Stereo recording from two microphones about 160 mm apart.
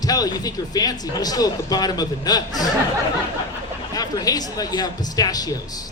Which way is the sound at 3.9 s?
25° left (ahead or behind).